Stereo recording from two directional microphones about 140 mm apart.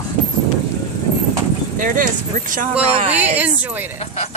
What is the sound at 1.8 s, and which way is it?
Speech, 70° right (ahead or behind).